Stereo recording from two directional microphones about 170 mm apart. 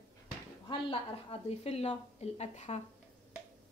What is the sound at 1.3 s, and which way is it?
Speech, 35° left (ahead or behind).